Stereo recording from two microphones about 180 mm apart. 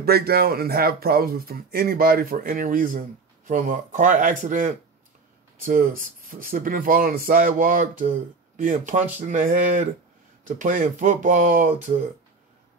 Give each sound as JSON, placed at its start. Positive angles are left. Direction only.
{"t": 0.0, "sound": "speech", "side_deg": -60}